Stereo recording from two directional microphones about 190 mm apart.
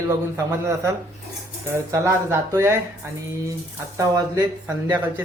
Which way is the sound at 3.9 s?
15° right (ahead or behind).